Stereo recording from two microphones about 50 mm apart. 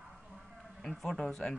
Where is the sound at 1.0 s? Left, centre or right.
Centre.